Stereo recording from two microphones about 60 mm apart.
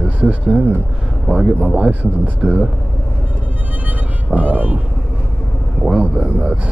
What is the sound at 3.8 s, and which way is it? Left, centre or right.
Music, right.